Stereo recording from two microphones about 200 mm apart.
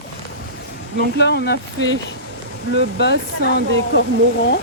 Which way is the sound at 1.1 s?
55° left (ahead or behind).